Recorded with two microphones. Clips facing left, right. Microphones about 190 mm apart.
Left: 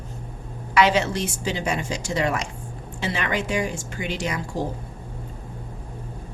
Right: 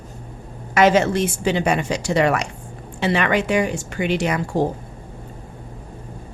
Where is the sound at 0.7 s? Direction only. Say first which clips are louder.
Right 4 dB; 45° right (ahead or behind); by 4.6 s 60° right (ahead or behind).